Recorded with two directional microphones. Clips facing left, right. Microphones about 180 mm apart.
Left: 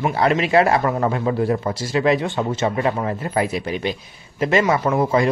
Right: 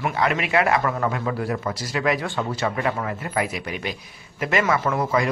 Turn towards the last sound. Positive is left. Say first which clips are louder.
# left 4 dB
turn(degrees=25)  # may be behind; listen again after turning